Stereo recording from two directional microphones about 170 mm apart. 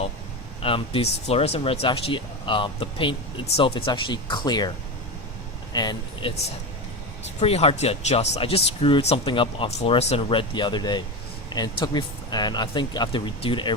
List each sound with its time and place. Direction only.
0.6 s speech: 30° left (ahead or behind)
5.7 s speech: 25° left (ahead or behind)
7.3 s speech: 40° left (ahead or behind)